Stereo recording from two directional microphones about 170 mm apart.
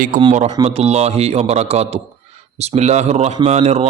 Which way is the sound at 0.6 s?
35° right (ahead or behind).